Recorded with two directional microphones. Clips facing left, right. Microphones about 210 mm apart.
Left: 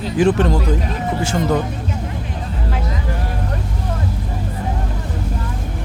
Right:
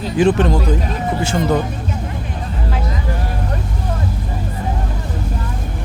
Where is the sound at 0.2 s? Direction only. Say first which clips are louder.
Right 1 dB; 20° right (ahead or behind).